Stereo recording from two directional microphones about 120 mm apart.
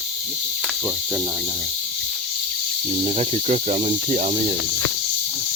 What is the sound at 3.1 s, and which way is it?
Speech, 60° right (ahead or behind).